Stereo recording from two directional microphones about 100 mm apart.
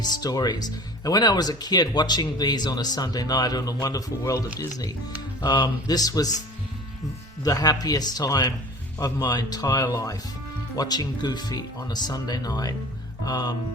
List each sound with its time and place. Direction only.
0.0 s speech: 45° left (ahead or behind)
7.4 s speech: 40° left (ahead or behind)